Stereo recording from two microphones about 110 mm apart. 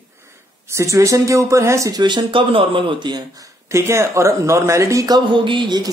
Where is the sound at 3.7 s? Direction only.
25° right (ahead or behind).